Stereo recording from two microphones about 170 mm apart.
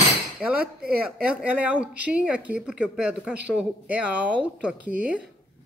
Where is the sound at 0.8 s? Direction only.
65° right (ahead or behind).